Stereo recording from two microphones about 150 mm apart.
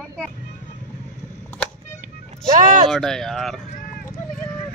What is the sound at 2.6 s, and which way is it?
Speech, 25° right (ahead or behind).